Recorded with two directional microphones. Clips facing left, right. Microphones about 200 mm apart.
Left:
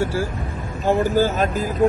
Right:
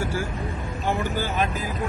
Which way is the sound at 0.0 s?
30° left (ahead or behind).